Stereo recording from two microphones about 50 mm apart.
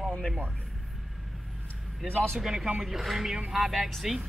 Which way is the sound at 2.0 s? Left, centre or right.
Centre.